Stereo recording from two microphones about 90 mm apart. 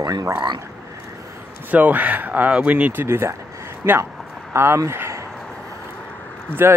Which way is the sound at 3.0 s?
30° right (ahead or behind).